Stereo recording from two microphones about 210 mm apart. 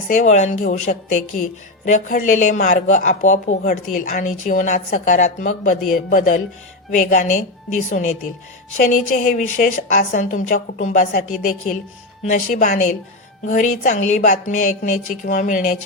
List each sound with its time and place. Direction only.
0.1 s speech: 35° left (ahead or behind)